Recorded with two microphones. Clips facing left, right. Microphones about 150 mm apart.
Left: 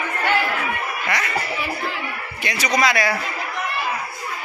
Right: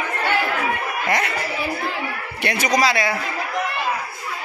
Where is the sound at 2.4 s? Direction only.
50° right (ahead or behind).